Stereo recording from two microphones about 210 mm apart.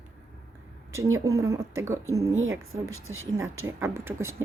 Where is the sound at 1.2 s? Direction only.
15° right (ahead or behind).